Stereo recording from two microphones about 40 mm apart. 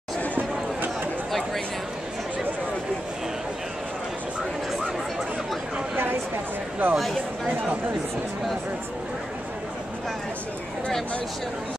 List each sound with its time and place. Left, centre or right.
6.8 s speech: right